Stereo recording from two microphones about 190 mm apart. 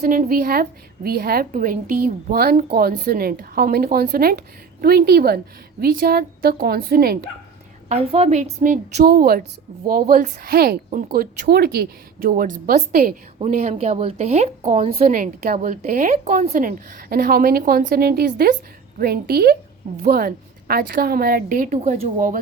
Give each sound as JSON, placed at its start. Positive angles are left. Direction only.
{"t": 0.0, "sound": "a woman's voice", "side_deg": -50}
{"t": 7.9, "sound": "speech", "side_deg": -30}
{"t": 9.0, "sound": "a woman's voice", "side_deg": -55}
{"t": 13.4, "sound": "speech", "side_deg": -40}
{"t": 15.0, "sound": "a woman's voice", "side_deg": -45}
{"t": 16.5, "sound": "a woman's voice", "side_deg": -50}